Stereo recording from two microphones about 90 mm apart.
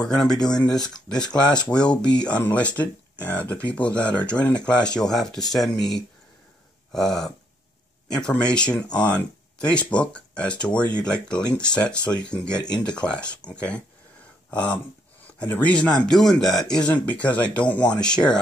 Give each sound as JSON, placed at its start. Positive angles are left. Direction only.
{"t": 0.0, "sound": "speech", "side_deg": 5}
{"t": 0.8, "sound": "speech", "side_deg": 50}
{"t": 1.7, "sound": "speech", "side_deg": 10}
{"t": 8.5, "sound": "speech", "side_deg": 10}